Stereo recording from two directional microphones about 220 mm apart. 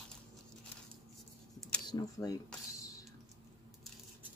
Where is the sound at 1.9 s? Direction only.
15° left (ahead or behind).